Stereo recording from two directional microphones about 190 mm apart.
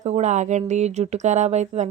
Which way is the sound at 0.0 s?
40° right (ahead or behind).